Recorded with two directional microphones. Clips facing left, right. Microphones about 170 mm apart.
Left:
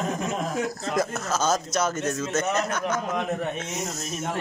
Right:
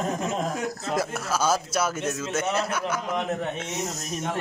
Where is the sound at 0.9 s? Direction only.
10° right (ahead or behind).